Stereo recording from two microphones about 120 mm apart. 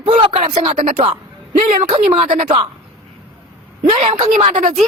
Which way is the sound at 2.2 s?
90° right.